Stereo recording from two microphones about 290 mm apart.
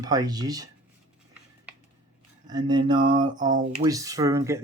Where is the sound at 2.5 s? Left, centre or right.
Centre.